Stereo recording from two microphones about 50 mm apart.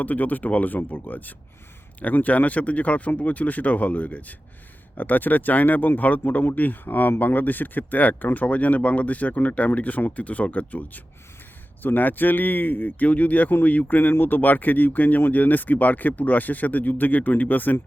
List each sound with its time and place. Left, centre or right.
0.0 s speech: left